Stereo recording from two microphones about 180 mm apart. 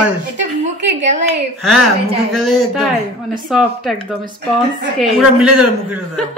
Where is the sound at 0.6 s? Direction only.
40° right (ahead or behind).